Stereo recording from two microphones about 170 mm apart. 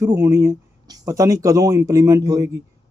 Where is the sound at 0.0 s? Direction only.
20° right (ahead or behind).